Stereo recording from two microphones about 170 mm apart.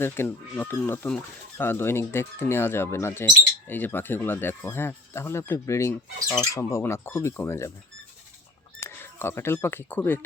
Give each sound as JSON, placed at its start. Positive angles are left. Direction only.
{"t": 0.0, "sound": "speech", "side_deg": 15}
{"t": 8.8, "sound": "speech", "side_deg": 15}